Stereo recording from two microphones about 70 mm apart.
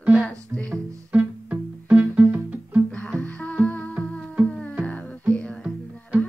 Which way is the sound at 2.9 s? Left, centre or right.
Centre.